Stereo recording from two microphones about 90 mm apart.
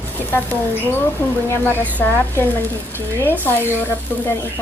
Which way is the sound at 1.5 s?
20° left (ahead or behind).